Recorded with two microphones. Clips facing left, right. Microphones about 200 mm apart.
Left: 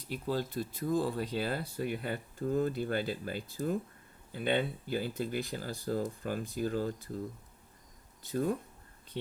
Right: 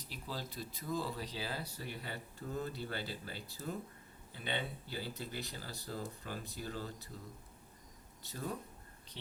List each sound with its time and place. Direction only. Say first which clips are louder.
0.3 s speech: left 10 dB; 50° left (ahead or behind)
8.3 s speech: left 11 dB; 50° left (ahead or behind)